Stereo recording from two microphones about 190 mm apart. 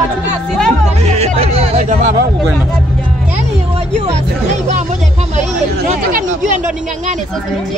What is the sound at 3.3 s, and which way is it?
Music, 35° right (ahead or behind).